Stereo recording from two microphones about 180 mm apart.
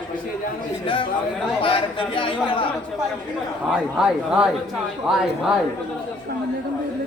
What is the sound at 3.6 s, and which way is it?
Speech, 5° right (ahead or behind).